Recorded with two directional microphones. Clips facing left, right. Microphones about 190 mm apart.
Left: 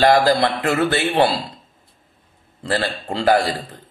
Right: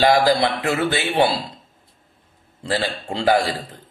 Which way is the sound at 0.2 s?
10° right (ahead or behind).